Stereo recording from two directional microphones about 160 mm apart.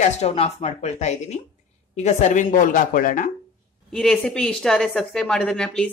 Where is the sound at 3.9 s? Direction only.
5° left (ahead or behind).